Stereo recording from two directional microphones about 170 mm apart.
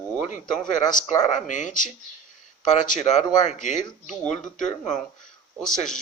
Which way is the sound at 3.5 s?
45° left (ahead or behind).